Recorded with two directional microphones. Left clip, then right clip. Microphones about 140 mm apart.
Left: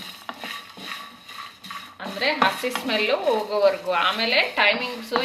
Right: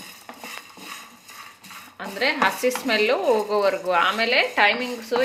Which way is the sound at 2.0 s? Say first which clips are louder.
Even; 80° right.